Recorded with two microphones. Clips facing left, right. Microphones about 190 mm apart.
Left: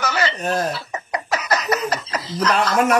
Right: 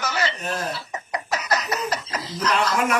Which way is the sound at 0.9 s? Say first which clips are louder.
Left 3 dB; 75° left (ahead or behind).